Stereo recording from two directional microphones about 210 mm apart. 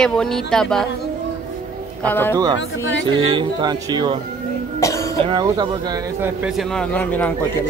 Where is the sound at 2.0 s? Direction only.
10° left (ahead or behind).